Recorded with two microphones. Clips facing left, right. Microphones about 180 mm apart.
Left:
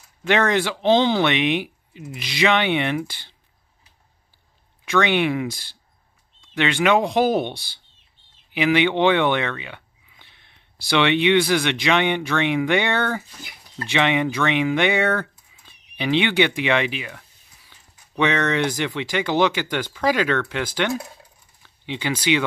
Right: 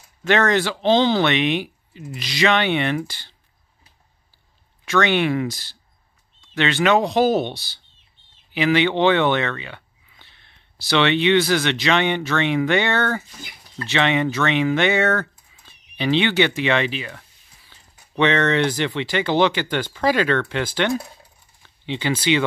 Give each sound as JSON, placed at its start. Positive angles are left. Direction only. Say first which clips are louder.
{"t": 0.2, "sound": "speech", "louder": "right 1 dB", "side_deg": 15}
{"t": 4.8, "sound": "speech", "louder": "right 1 dB", "side_deg": 15}
{"t": 6.5, "sound": "speech", "louder": "right 1 dB", "side_deg": 15}
{"t": 8.5, "sound": "speech", "louder": "even", "side_deg": 15}